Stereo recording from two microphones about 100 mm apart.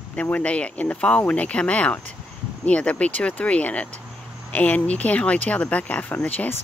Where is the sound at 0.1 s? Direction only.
15° left (ahead or behind).